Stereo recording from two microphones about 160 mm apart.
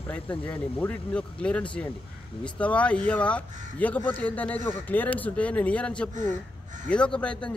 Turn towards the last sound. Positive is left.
turn(degrees=5)  # may be behind; listen again after turning